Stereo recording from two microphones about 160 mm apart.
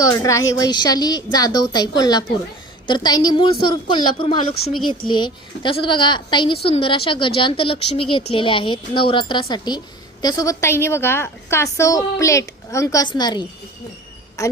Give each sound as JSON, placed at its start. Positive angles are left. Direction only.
{"t": 0.0, "sound": "a woman's voice", "side_deg": 20}